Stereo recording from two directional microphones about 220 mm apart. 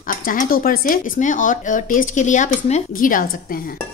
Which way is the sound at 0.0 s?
40° left (ahead or behind).